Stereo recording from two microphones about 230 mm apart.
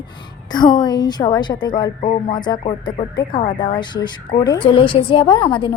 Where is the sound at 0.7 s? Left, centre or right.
Centre.